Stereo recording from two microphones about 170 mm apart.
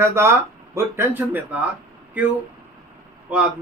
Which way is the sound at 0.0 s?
15° right (ahead or behind).